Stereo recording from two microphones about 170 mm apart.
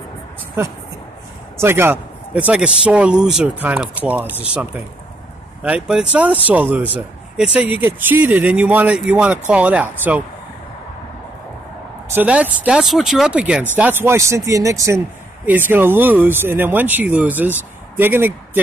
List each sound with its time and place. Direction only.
1.6 s speech: 15° right (ahead or behind)
5.6 s speech: 5° right (ahead or behind)
12.1 s speech: 10° right (ahead or behind)